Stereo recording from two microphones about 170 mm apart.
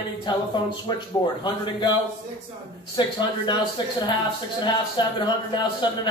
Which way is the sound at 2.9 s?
25° left (ahead or behind).